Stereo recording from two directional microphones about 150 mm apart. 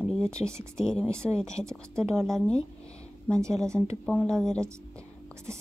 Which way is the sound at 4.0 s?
5° left (ahead or behind).